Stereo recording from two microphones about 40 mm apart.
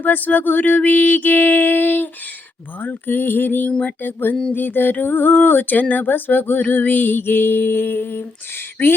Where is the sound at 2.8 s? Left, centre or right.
Left.